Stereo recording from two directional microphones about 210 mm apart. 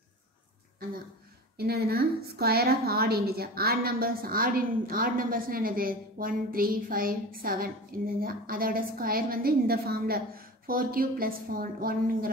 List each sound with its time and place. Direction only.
1.6 s a woman's voice: 45° right (ahead or behind)